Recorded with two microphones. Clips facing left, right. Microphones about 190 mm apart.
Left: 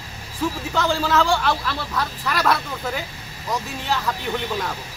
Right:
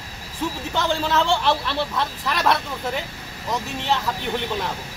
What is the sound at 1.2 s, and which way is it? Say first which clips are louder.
Speech: even; 25° right (ahead or behind).